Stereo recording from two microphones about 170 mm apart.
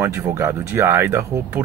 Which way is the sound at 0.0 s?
15° right (ahead or behind).